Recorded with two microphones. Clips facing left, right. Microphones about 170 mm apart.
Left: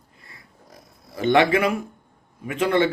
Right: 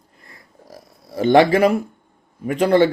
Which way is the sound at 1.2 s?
35° right (ahead or behind).